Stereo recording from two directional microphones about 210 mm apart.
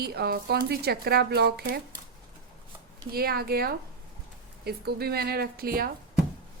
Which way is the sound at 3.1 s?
45° right (ahead or behind).